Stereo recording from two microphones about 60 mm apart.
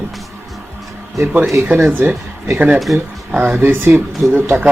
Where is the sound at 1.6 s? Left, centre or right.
Right.